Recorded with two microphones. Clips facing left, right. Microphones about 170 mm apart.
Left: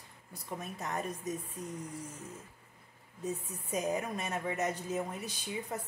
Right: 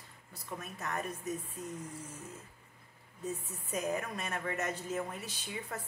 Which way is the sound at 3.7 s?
15° left (ahead or behind).